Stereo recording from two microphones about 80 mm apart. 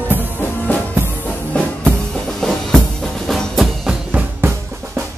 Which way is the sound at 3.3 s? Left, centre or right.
Centre.